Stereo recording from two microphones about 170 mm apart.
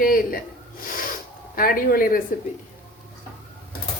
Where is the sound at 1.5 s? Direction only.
60° left (ahead or behind).